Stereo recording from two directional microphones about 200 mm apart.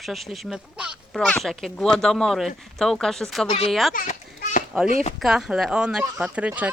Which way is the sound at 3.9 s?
40° left (ahead or behind).